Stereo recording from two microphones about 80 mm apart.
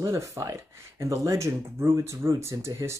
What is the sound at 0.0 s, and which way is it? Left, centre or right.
Speech, right.